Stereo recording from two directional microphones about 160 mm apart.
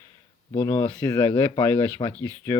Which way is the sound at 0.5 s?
20° left (ahead or behind).